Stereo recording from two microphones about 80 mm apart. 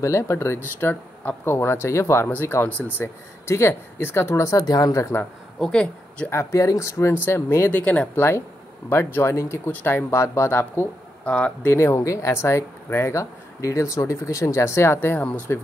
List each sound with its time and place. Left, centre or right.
0.0 s speech: left
4.6 s speech: left
5.6 s a woman's voice: centre
6.3 s speech: left; by 8.1 s centre
8.2 s speech: left
11.2 s speech: centre
11.7 s speech: left